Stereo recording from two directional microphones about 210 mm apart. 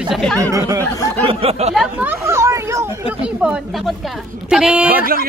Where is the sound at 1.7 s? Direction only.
5° right (ahead or behind).